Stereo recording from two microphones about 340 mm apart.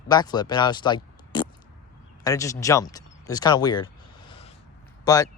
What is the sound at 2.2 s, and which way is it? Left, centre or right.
Speech, centre.